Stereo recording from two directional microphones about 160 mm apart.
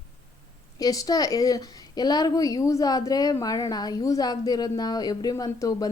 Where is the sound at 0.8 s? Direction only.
25° left (ahead or behind).